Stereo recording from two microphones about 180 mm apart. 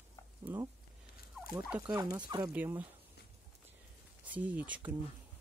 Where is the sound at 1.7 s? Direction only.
10° right (ahead or behind).